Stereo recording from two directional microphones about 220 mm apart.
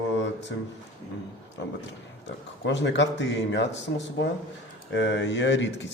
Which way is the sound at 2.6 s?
55° left (ahead or behind).